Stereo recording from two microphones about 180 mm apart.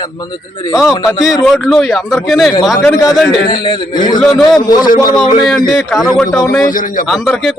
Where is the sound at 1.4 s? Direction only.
Centre (ahead or behind).